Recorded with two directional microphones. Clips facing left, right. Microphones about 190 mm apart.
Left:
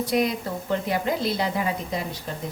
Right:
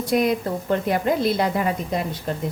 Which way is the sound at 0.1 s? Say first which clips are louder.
Right 6 dB; 50° right (ahead or behind).